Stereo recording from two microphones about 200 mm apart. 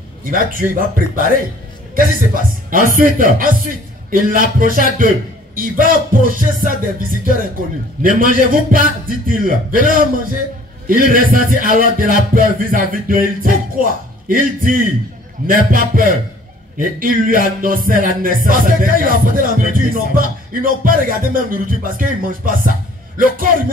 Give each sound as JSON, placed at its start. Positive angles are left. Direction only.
{"t": 0.2, "sound": "music", "side_deg": -45}